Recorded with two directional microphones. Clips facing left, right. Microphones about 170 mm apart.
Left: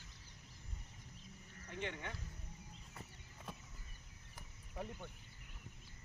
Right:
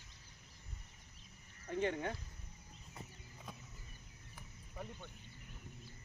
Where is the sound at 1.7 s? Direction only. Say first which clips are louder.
Right 8 dB; 40° right (ahead or behind).